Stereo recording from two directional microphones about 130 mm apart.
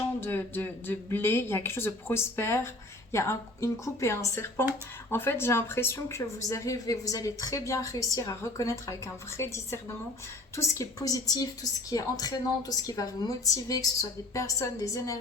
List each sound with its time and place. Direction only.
0.2 s speech: 15° left (ahead or behind)